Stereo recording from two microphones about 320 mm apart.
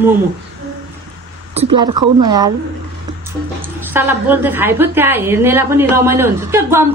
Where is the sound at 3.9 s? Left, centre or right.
Centre.